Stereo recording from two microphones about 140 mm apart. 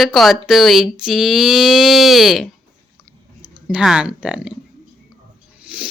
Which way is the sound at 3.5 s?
5° right (ahead or behind).